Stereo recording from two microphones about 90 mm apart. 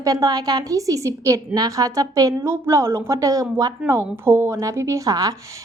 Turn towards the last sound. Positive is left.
turn(degrees=-40)  # may be behind; listen again after turning